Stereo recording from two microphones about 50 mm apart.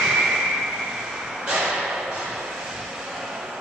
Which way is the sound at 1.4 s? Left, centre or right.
Centre.